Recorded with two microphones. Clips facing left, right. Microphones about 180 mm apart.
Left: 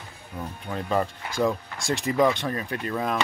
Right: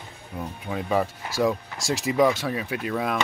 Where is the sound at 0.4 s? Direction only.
5° right (ahead or behind).